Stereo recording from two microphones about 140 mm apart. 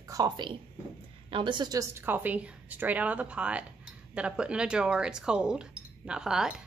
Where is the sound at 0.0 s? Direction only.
25° right (ahead or behind).